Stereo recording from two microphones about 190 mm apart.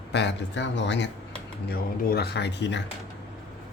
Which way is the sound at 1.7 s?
55° left (ahead or behind).